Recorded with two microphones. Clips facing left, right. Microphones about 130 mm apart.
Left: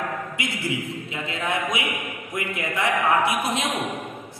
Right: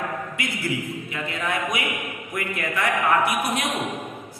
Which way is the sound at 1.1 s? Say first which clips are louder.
Left 1 dB; 25° left (ahead or behind).